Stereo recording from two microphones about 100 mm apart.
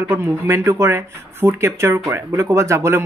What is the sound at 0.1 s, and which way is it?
A man's voice, 30° right (ahead or behind).